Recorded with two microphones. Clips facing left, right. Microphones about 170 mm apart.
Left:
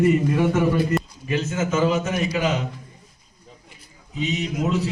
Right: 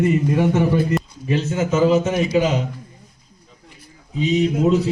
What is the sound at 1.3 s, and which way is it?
A man's voice, 35° right (ahead or behind).